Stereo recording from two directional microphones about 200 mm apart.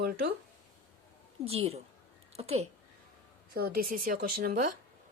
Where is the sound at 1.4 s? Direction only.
30° right (ahead or behind).